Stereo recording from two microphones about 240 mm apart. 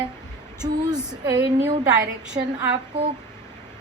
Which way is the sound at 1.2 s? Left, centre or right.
Centre.